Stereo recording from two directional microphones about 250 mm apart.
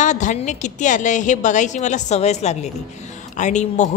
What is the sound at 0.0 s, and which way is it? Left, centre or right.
A woman's voice, left.